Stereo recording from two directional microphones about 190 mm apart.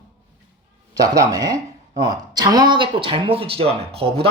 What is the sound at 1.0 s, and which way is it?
Speech, 20° right (ahead or behind).